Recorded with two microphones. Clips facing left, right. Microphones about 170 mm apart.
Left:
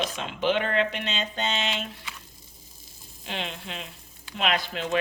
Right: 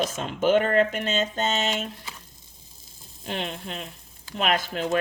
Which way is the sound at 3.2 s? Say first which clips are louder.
Right 3 dB; 45° right (ahead or behind).